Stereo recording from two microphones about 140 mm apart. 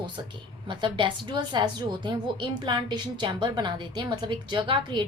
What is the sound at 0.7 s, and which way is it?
A woman's voice, 35° right (ahead or behind).